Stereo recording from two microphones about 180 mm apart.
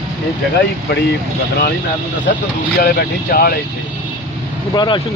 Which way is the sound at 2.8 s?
60° left (ahead or behind).